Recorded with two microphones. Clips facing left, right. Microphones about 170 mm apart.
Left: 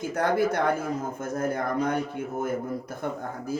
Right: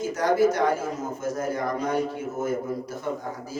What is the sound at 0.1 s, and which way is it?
A man's voice, 55° left (ahead or behind).